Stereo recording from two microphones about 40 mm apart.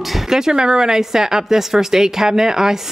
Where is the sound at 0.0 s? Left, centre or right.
Centre.